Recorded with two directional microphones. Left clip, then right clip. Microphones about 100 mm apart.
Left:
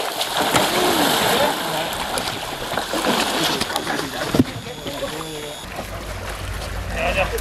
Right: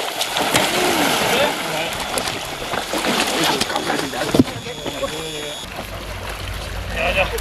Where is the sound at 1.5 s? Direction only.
10° left (ahead or behind).